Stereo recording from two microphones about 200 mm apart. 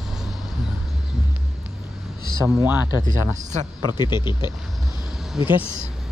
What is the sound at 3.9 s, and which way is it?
Speech, 20° left (ahead or behind).